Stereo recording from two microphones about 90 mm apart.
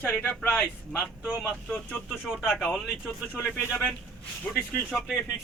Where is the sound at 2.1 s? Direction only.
10° right (ahead or behind).